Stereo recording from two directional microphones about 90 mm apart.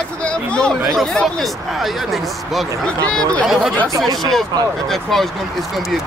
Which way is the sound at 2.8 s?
10° left (ahead or behind).